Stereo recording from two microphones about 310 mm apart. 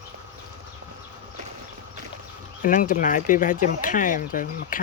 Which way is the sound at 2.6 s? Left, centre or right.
Left.